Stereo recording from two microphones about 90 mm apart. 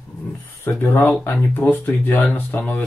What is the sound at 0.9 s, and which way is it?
Speech, 25° left (ahead or behind).